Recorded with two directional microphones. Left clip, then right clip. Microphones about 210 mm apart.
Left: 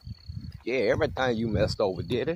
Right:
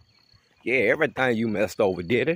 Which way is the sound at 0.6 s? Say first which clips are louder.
Right 4 dB; 35° right (ahead or behind).